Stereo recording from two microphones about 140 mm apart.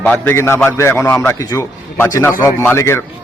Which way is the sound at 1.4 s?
20° left (ahead or behind).